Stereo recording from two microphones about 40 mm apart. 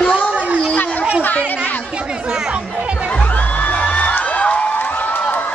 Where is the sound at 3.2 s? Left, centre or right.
Left.